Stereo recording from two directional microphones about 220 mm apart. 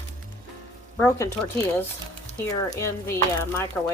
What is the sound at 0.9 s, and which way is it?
Speech, 10° left (ahead or behind).